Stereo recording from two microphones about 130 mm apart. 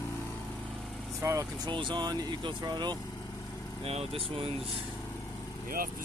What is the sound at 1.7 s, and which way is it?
Speech, 35° right (ahead or behind).